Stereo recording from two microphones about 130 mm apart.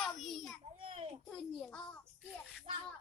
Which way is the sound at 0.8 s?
50° right (ahead or behind).